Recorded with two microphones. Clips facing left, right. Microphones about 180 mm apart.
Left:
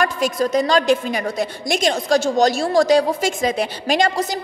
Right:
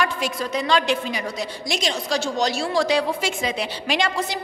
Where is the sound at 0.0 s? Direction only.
45° left (ahead or behind).